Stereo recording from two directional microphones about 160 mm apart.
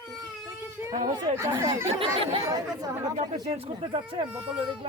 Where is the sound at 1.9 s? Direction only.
35° right (ahead or behind).